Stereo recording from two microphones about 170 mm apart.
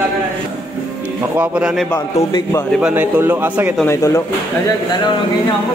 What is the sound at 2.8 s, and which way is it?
Speech, 10° right (ahead or behind).